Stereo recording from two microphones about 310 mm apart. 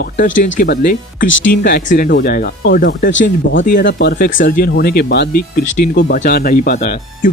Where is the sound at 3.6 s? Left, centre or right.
Left.